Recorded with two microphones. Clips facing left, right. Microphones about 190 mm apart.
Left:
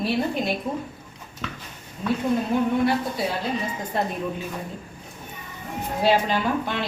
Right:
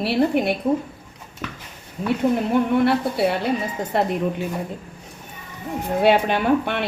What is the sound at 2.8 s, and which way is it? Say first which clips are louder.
A woman's voice: right 4 dB; 65° right (ahead or behind).